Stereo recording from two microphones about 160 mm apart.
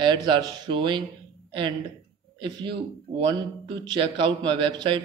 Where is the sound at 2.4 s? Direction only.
30° right (ahead or behind).